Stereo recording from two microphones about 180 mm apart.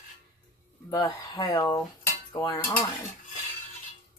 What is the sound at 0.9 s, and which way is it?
Dishes, 20° left (ahead or behind).